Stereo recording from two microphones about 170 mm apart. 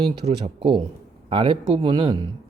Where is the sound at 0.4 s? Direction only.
30° right (ahead or behind).